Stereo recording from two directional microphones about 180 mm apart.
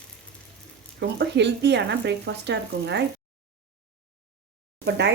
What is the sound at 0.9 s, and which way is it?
Speech, 70° right (ahead or behind).